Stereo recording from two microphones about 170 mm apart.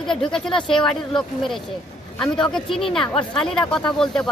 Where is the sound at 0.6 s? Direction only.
30° left (ahead or behind).